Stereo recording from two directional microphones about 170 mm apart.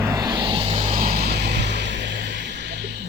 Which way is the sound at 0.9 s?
60° right (ahead or behind).